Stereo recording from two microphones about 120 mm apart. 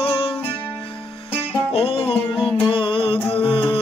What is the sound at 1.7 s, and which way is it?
Music, 50° left (ahead or behind).